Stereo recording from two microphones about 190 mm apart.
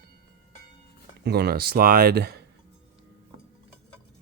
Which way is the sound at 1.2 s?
60° right (ahead or behind).